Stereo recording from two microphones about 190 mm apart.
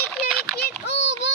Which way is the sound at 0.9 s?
70° left (ahead or behind).